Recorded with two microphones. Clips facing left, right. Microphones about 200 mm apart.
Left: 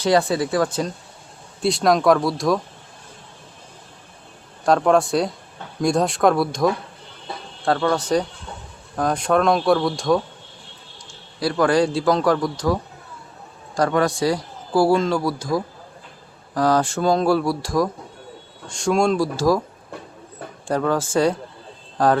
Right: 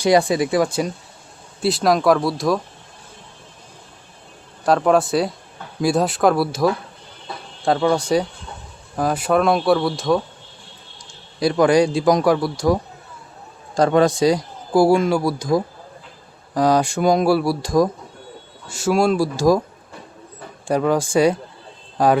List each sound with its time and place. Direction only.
0.0 s a man's voice: 15° right (ahead or behind)
4.6 s a man's voice: 5° right (ahead or behind)
11.3 s a man's voice: 20° right (ahead or behind)
18.7 s a man's voice: 5° right (ahead or behind)
20.7 s a man's voice: 15° right (ahead or behind)